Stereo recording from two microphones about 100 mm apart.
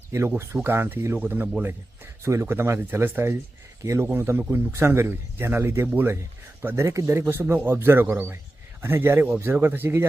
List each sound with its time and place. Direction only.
0.1 s a man's voice: 25° right (ahead or behind)